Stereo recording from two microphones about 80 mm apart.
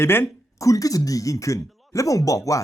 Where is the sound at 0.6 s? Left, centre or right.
Left.